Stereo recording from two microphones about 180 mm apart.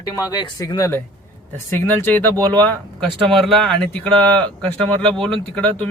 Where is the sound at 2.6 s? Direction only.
5° left (ahead or behind).